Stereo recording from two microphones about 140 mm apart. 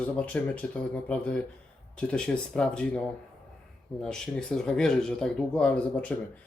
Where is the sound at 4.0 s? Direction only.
5° left (ahead or behind).